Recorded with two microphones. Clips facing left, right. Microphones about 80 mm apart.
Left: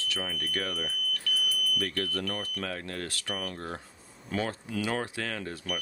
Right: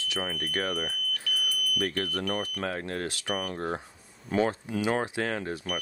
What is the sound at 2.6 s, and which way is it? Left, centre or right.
Speech, right.